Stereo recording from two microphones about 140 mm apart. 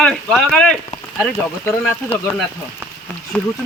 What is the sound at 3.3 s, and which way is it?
Speech, 10° left (ahead or behind).